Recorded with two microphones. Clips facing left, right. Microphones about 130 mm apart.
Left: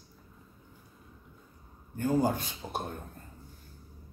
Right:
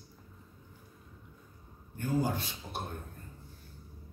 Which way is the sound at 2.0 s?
45° left (ahead or behind).